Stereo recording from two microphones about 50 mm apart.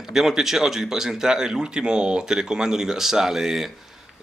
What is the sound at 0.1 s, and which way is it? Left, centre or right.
Speech, centre.